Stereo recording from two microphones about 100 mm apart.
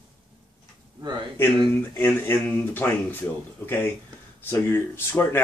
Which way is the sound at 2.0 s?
20° left (ahead or behind).